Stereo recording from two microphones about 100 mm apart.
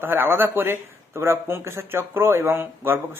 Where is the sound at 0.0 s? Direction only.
20° right (ahead or behind).